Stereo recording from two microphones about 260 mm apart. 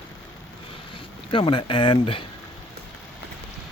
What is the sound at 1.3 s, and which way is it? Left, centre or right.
Speech, centre.